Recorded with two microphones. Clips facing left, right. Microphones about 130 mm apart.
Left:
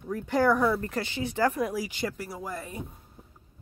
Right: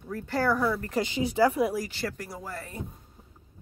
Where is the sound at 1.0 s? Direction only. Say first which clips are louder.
Right 5 dB; 15° right (ahead or behind).